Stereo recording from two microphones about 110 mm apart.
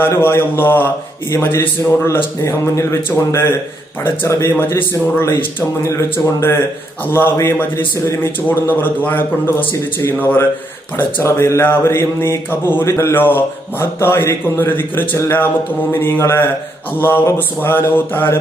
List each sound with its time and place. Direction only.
0.0 s a man's voice: 20° left (ahead or behind)